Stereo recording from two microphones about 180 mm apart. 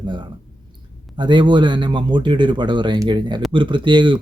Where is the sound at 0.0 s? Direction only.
25° right (ahead or behind).